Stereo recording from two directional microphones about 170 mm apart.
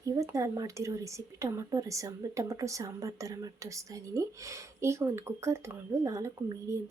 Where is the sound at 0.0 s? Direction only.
20° right (ahead or behind).